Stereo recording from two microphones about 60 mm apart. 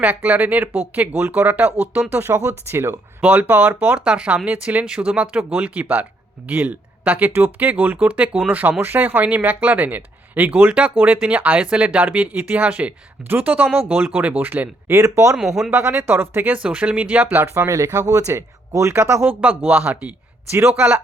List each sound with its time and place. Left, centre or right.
0.0 s speech: right
3.2 s speech: right
4.0 s speech: centre
8.8 s speech: right
10.7 s speech: centre
14.8 s speech: right
15.4 s speech: centre
15.7 s speech: right
16.6 s speech: right
17.3 s speech: right
17.7 s speech: right
19.4 s speech: right
20.5 s speech: right